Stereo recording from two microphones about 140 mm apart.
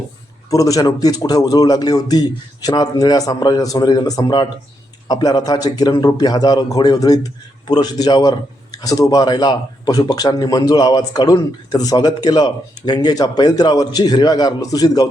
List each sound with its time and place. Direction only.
0.5 s a man's voice: 25° left (ahead or behind)